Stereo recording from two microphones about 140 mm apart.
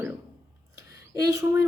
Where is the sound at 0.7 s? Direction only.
20° right (ahead or behind).